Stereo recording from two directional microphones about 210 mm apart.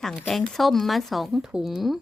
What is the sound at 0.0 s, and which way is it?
Speech, centre (ahead or behind).